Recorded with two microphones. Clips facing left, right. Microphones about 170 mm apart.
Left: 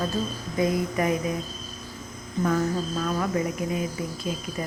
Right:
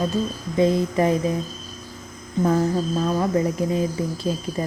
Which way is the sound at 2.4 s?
30° right (ahead or behind).